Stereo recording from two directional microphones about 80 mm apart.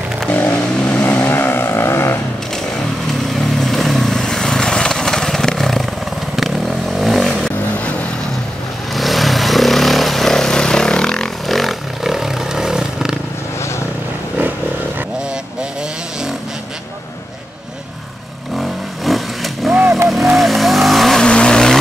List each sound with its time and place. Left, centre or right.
0.3 s vehicle: centre
3.5 s vehicle: centre
8.9 s vehicle: centre
18.6 s vehicle: centre